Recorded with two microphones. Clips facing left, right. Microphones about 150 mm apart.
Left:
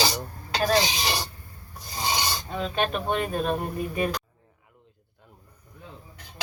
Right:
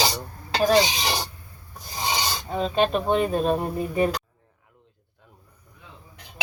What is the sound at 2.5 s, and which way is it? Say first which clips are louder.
Speech: right 7 dB; 30° right (ahead or behind).